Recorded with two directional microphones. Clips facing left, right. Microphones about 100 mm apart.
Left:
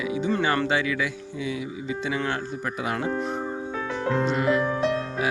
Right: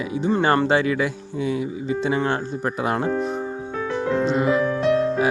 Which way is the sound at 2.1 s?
30° right (ahead or behind).